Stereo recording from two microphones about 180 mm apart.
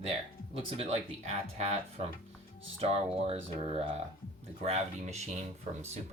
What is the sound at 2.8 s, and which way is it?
Speech, 35° right (ahead or behind).